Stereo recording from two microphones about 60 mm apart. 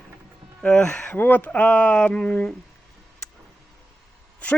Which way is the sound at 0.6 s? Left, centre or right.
Centre.